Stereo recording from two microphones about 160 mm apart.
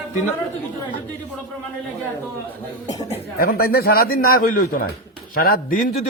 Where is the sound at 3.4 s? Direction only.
70° left (ahead or behind).